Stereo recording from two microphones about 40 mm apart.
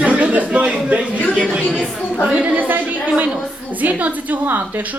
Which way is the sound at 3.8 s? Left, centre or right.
Right.